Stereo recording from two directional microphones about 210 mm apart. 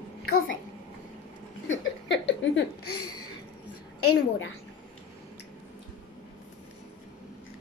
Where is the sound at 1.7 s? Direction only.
60° left (ahead or behind); by 3.2 s 90° left.